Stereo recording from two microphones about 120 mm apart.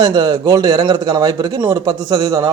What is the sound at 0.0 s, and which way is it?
A man's voice, 35° right (ahead or behind).